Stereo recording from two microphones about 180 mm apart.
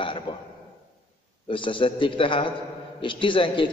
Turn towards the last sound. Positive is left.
turn(degrees=30)  # may be behind; listen again after turning